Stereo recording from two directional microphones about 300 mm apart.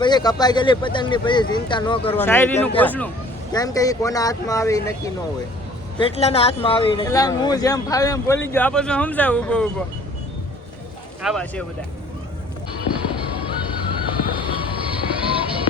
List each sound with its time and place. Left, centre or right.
0.0 s speech: centre
11.2 s speech: centre
14.0 s vehicle: centre
14.7 s vehicle: centre